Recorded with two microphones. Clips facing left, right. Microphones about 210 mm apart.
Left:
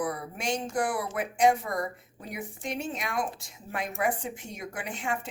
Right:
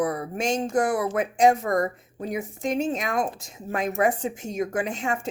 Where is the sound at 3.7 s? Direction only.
45° right (ahead or behind).